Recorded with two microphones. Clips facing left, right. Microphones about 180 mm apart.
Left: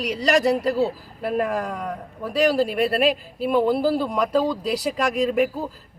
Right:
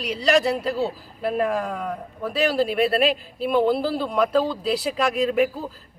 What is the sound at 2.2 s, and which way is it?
Speech, 15° left (ahead or behind).